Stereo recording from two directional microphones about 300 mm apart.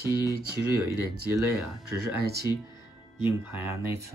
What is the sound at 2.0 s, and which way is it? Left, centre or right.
Speech, right.